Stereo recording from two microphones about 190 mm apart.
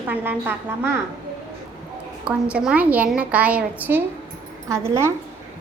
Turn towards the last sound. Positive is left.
turn(degrees=-15)  # may be behind; listen again after turning